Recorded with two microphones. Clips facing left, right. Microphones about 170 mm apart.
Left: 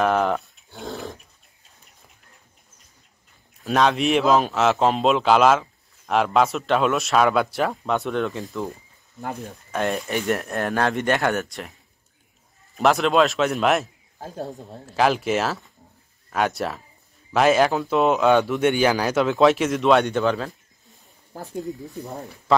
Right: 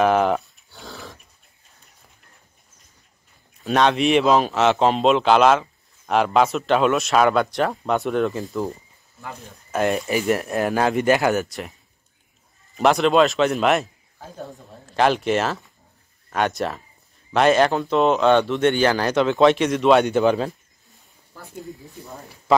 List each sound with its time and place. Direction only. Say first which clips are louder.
0.0 s speech: right 3 dB; 5° right (ahead or behind)
0.6 s dog: left 7 dB; 20° left (ahead or behind)
3.6 s a man's voice: right 1 dB; centre (ahead or behind)
9.7 s a man's voice: right 3 dB; centre (ahead or behind)
12.7 s a man's voice: right 2 dB; centre (ahead or behind)
14.1 s speech: left 4 dB; 40° left (ahead or behind)
14.5 s a man's voice: left 4 dB; centre (ahead or behind)
20.2 s speech: right 4 dB; 20° right (ahead or behind)